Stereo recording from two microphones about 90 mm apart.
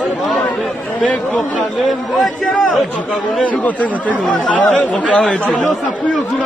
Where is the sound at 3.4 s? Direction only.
15° left (ahead or behind).